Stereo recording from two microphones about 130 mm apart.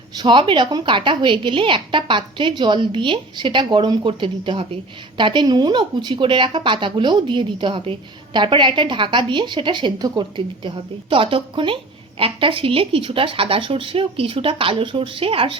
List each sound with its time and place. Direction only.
0.2 s a woman's voice: 40° right (ahead or behind)